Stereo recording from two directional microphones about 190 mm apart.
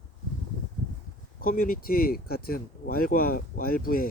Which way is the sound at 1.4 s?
50° left (ahead or behind).